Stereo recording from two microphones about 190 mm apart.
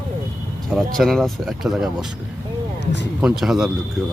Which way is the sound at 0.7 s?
Centre (ahead or behind).